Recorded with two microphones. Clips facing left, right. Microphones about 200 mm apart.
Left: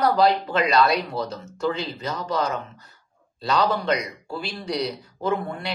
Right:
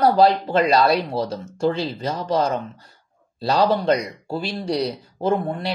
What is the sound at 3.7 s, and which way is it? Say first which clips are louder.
A woman's voice: right 5 dB; 30° right (ahead or behind).